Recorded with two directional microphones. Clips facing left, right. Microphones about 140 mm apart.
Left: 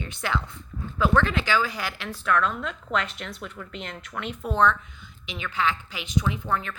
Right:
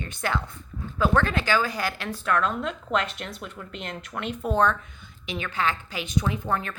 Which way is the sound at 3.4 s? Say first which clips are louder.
Even; 15° right (ahead or behind).